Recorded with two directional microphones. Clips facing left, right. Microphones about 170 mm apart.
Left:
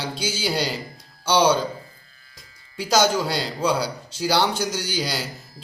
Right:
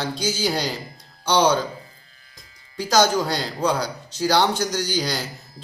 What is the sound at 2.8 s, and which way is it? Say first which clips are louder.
Mantra: right 1 dB; 5° left (ahead or behind).